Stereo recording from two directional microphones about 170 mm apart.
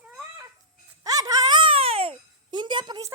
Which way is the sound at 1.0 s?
20° right (ahead or behind).